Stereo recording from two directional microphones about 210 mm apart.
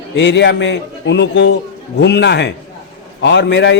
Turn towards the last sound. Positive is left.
turn(degrees=60)  # may be behind; listen again after turning